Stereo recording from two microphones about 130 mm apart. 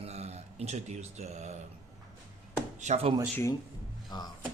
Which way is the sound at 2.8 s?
55° right (ahead or behind).